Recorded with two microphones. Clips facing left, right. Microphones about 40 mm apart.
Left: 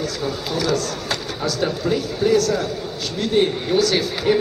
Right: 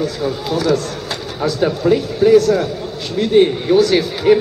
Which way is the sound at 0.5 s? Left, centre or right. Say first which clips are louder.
Right 5 dB; right.